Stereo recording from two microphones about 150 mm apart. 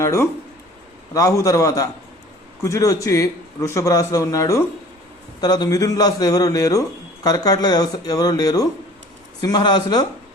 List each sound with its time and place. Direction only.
0.0 s a man's voice: 20° left (ahead or behind)